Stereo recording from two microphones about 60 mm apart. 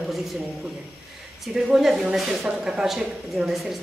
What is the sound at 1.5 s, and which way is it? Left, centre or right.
Speech, centre.